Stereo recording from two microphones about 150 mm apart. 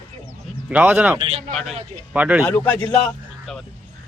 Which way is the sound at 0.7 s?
10° right (ahead or behind).